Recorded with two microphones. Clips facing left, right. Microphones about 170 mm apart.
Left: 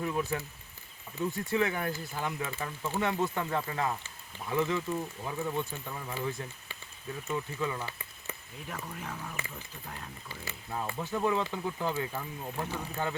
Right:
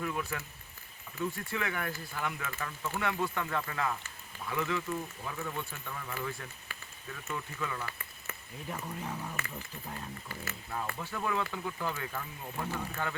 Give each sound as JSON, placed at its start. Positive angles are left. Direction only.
{"t": 0.0, "sound": "speech", "side_deg": 20}
{"t": 8.7, "sound": "speech", "side_deg": -10}
{"t": 10.2, "sound": "speech", "side_deg": 15}